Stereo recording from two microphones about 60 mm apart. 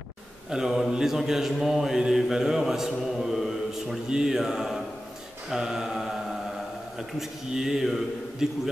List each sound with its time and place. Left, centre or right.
0.5 s mantra: centre